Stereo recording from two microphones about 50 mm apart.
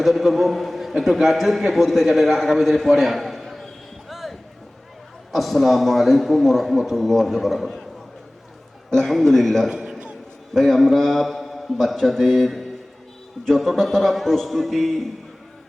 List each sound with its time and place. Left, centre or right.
0.0 s a man's voice: centre
4.1 s music: centre
5.3 s a man's voice: centre
9.0 s a man's voice: centre
9.6 s a man's voice: centre
10.5 s a man's voice: centre